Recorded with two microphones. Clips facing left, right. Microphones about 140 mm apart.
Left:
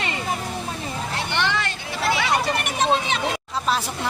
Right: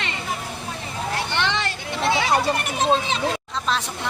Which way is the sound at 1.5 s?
25° right (ahead or behind).